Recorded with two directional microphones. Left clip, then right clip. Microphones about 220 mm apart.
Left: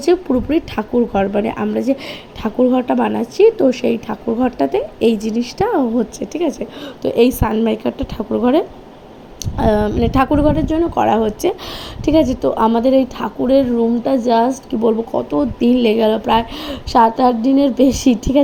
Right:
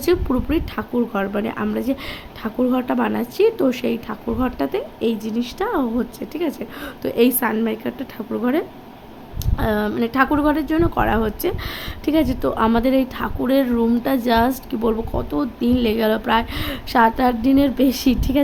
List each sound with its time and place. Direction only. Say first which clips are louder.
0.0 s a woman's voice: left 4 dB; 5° left (ahead or behind)